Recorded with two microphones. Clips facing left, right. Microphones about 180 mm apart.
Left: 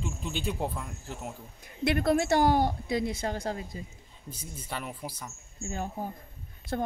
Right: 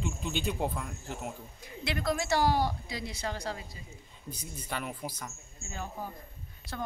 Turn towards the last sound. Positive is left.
turn(degrees=50)  # may be behind; listen again after turning